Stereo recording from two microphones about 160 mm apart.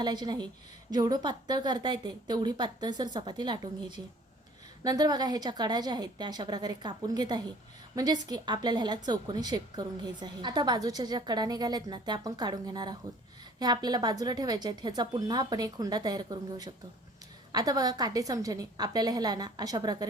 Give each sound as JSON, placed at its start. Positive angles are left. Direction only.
{"t": 0.0, "sound": "a woman's voice", "side_deg": -25}